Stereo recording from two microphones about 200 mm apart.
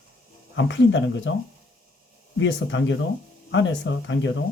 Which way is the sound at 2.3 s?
65° left (ahead or behind).